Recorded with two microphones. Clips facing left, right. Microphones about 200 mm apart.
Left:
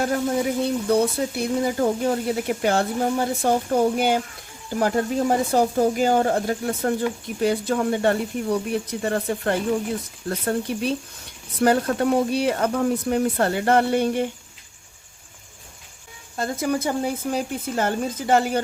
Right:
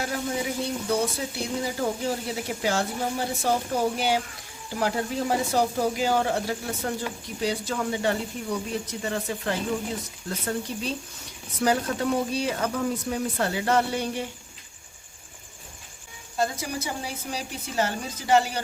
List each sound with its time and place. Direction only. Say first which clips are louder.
0.0 s speech: left 7 dB; 50° left (ahead or behind)
16.4 s speech: left 5 dB; 55° left (ahead or behind)